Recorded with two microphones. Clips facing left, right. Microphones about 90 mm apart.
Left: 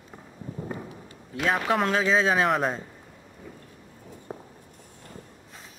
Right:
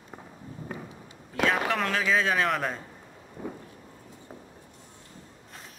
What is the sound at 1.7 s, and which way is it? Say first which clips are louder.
Speech: left 3 dB; 20° left (ahead or behind).